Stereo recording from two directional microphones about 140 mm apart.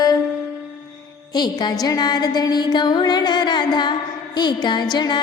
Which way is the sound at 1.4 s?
30° left (ahead or behind).